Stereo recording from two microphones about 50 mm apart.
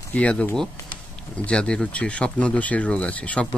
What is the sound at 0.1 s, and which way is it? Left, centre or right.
Speech, left.